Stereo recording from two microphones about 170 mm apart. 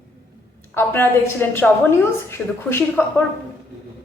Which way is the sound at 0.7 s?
15° left (ahead or behind).